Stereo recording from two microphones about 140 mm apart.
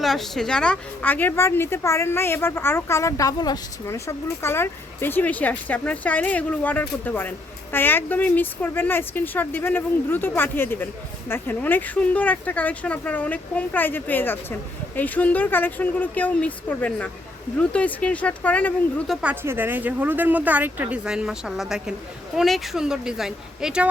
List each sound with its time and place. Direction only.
0.0 s speech: centre (ahead or behind)
19.3 s speech: 15° right (ahead or behind)